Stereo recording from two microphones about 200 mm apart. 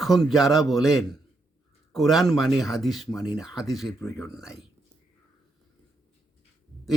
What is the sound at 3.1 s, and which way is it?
Speech, 15° left (ahead or behind).